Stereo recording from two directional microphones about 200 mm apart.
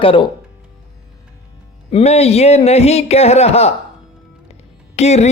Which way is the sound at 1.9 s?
30° left (ahead or behind).